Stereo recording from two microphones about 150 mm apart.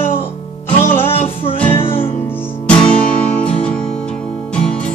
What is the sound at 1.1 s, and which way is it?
Music, 40° left (ahead or behind).